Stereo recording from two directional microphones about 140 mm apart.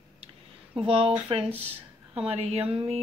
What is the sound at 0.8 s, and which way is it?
Speech, 40° right (ahead or behind).